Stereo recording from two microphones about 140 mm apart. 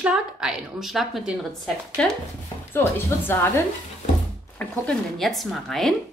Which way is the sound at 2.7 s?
15° left (ahead or behind).